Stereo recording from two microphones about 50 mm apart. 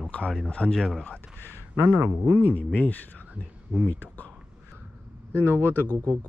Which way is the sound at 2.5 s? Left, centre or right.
Left.